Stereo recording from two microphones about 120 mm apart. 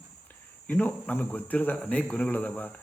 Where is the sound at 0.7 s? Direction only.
15° left (ahead or behind).